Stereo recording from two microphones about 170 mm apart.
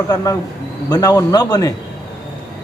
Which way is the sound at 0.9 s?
20° left (ahead or behind).